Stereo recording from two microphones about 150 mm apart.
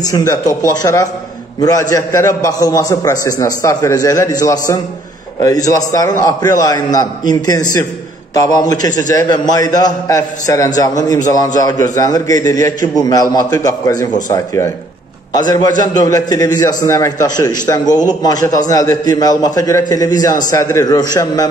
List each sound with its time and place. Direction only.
0.0 s a man's voice: 25° left (ahead or behind)